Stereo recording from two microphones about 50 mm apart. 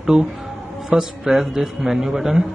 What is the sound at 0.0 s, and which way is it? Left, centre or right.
A man's voice, centre.